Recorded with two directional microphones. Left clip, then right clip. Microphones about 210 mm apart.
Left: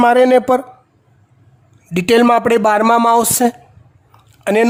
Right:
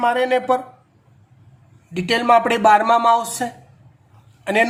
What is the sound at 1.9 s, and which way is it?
Speech, 55° left (ahead or behind).